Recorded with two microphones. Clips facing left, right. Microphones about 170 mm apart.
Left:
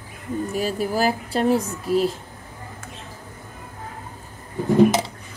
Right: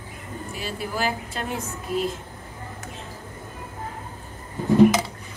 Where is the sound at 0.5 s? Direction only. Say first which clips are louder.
Left 6 dB; 40° left (ahead or behind).